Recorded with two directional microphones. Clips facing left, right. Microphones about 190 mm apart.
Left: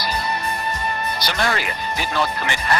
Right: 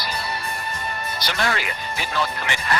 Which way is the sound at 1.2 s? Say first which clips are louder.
Left 1 dB; 40° left (ahead or behind).